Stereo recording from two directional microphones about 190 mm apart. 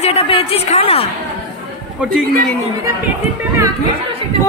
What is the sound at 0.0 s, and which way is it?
A woman's voice, 30° left (ahead or behind).